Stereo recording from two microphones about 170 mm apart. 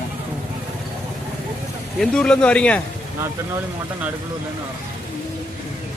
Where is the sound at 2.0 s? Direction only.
5° left (ahead or behind).